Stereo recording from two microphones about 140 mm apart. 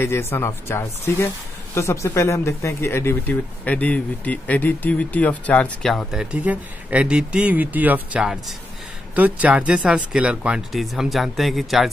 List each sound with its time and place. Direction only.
0.0 s speech: 20° left (ahead or behind)
6.3 s speech: 10° right (ahead or behind)